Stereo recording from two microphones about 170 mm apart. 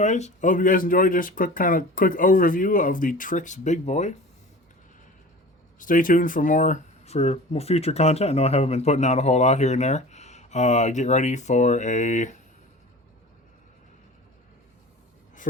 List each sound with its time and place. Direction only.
0.0 s speech: 45° left (ahead or behind)
5.8 s speech: 50° left (ahead or behind)